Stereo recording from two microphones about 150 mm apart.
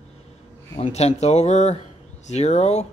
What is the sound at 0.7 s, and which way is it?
Speech, 45° left (ahead or behind).